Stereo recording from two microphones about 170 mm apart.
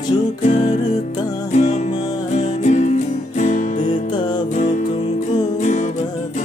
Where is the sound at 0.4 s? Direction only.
40° left (ahead or behind).